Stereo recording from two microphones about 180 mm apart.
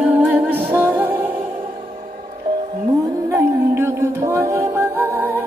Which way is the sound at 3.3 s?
15° right (ahead or behind).